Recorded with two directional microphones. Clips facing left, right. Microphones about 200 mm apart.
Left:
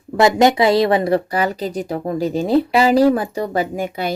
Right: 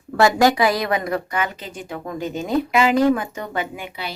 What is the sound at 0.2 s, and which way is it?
Speech, 20° left (ahead or behind).